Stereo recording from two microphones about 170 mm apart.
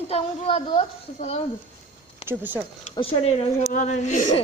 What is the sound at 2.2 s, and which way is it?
Speech, 10° right (ahead or behind).